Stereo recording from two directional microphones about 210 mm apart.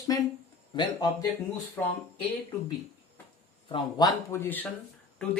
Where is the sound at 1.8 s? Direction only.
10° left (ahead or behind).